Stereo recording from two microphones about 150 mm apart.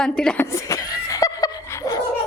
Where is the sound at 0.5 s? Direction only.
20° left (ahead or behind).